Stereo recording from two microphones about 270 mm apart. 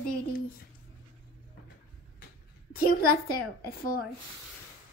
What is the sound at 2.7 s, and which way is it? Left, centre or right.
Speech, left.